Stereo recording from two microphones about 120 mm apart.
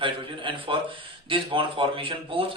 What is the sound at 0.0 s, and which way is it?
A man's voice, 45° right (ahead or behind).